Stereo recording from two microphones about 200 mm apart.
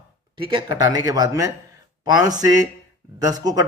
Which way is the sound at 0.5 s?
20° right (ahead or behind).